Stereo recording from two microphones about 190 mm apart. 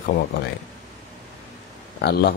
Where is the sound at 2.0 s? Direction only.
55° left (ahead or behind).